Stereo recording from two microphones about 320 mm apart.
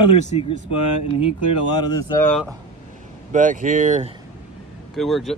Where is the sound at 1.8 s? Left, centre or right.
Centre.